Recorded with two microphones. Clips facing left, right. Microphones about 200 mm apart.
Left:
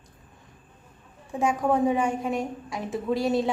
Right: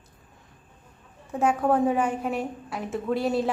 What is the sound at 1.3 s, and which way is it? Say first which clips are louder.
Speech: right 1 dB; 10° left (ahead or behind).